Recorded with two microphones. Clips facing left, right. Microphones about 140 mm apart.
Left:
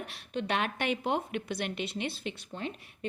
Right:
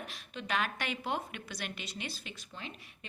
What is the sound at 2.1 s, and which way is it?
Speech, 30° left (ahead or behind).